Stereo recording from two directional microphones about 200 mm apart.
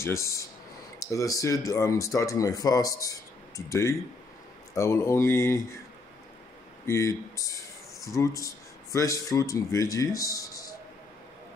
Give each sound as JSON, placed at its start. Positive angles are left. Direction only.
{"t": 0.0, "sound": "speech", "side_deg": 15}
{"t": 6.9, "sound": "speech", "side_deg": 15}